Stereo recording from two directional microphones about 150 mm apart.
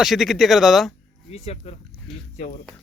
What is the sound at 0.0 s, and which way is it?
Speech, centre (ahead or behind).